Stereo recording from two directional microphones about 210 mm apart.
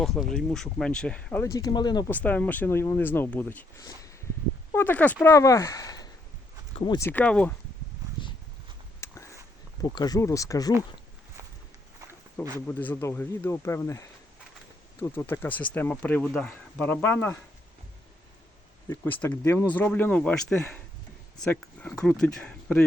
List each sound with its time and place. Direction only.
0.0 s speech: centre (ahead or behind); by 2.0 s 20° left (ahead or behind)
2.0 s speech: 10° left (ahead or behind)
7.1 s speech: 5° left (ahead or behind)
9.0 s a sound: 15° left (ahead or behind)
9.8 s speech: 20° left (ahead or behind)
12.6 s speech: 10° left (ahead or behind)
18.9 s speech: 10° left (ahead or behind)
21.3 s speech: 5° left (ahead or behind)